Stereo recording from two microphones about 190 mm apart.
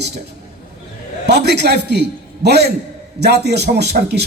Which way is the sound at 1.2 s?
60° right (ahead or behind).